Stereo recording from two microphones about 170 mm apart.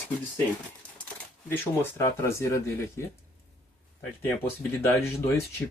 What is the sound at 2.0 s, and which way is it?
Speech, 15° left (ahead or behind).